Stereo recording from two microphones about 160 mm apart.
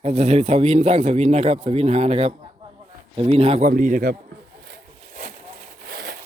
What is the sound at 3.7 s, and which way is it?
Speech, 55° right (ahead or behind).